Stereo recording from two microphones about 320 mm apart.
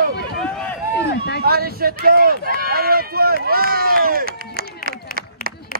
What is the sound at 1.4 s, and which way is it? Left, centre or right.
Speech, right.